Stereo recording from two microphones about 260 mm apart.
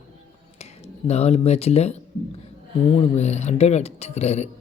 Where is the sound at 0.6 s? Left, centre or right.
Left.